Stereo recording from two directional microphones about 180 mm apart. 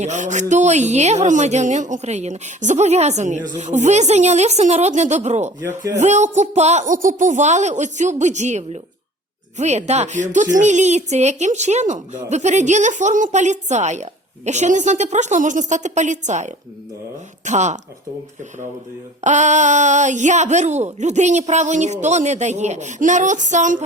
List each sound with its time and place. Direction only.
0.0 s a woman's voice: 40° right (ahead or behind)
5.5 s speech: 20° right (ahead or behind)
6.0 s a woman's voice: 40° right (ahead or behind)
19.2 s a woman's voice: 40° right (ahead or behind)